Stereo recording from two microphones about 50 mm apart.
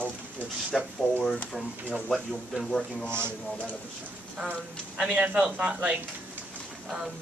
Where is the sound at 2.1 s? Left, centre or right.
Centre.